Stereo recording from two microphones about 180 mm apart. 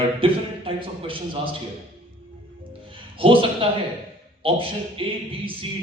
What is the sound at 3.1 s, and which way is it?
A man's voice, 30° right (ahead or behind).